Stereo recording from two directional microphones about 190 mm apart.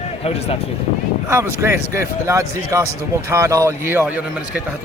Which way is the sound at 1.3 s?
15° right (ahead or behind).